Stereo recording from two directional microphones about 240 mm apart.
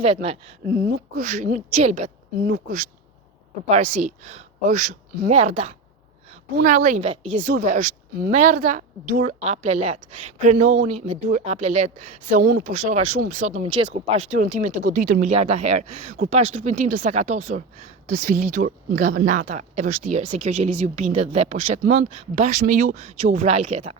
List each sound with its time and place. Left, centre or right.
0.0 s speech: right
0.7 s speech: right
2.4 s speech: right
4.0 s a woman's voice: right
12.3 s speech: right